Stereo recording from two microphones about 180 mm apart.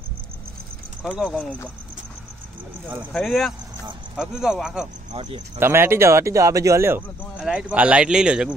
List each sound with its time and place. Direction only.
1.1 s speech: centre (ahead or behind)
3.1 s speech: 5° left (ahead or behind)